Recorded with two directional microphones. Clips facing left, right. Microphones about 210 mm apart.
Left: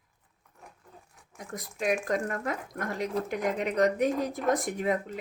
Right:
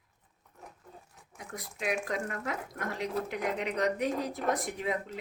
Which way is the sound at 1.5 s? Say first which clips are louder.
Left 4 dB; 45° left (ahead or behind).